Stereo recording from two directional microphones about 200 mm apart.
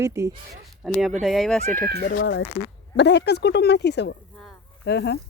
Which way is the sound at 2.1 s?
65° left (ahead or behind).